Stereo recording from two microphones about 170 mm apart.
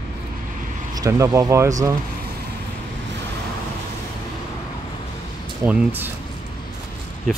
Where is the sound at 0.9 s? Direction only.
20° right (ahead or behind).